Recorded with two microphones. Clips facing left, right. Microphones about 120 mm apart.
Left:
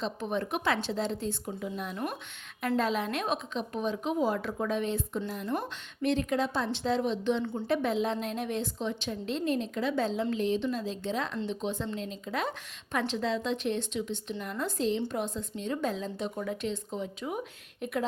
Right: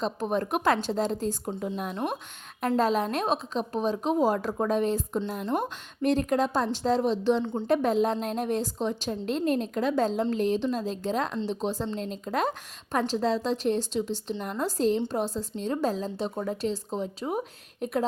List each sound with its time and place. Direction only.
0.0 s a woman's voice: 40° right (ahead or behind)